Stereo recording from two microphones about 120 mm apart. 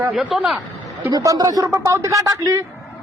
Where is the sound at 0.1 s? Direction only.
5° right (ahead or behind).